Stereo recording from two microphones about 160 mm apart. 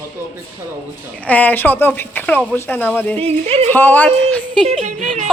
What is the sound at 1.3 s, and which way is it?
A man's voice, 10° left (ahead or behind).